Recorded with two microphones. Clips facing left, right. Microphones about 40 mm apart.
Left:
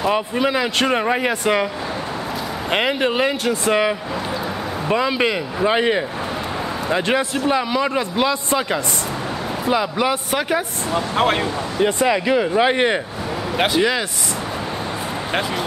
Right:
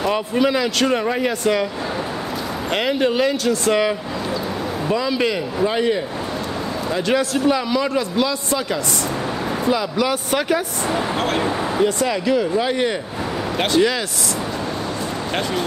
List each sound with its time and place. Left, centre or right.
0.0 s a man's voice: centre
2.7 s a man's voice: left
11.1 s speech: left
13.6 s a man's voice: centre